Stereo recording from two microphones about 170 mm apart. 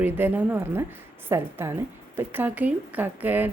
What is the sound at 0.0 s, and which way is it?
A woman's voice, 10° right (ahead or behind).